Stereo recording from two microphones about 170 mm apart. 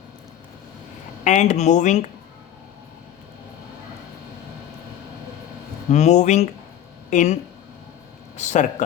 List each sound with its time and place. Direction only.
1.2 s speech: 45° left (ahead or behind)
5.9 s speech: 45° left (ahead or behind)
8.4 s speech: 45° left (ahead or behind)